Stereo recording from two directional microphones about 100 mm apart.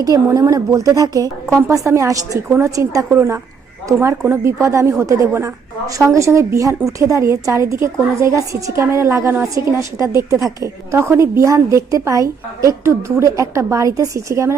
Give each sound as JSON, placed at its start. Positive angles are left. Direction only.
{"t": 0.0, "sound": "a woman's voice", "side_deg": -35}
{"t": 1.5, "sound": "a woman's voice", "side_deg": -25}
{"t": 4.2, "sound": "a woman's voice", "side_deg": -25}